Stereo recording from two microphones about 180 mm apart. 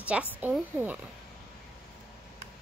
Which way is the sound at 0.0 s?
5° right (ahead or behind).